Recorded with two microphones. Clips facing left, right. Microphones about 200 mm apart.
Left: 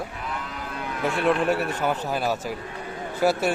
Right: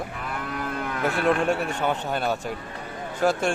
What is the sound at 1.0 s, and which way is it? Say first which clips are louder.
A man's voice: even; centre (ahead or behind).